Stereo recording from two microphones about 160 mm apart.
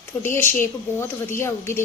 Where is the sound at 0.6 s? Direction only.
15° left (ahead or behind).